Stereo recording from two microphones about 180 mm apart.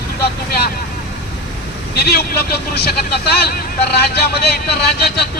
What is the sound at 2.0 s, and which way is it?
Speech, 60° left (ahead or behind).